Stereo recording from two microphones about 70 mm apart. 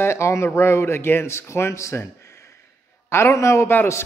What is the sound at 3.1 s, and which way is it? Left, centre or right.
Speech, left.